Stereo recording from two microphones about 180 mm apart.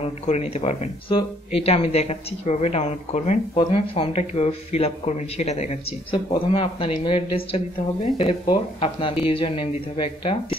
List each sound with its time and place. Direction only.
0.0 s speech: 35° left (ahead or behind)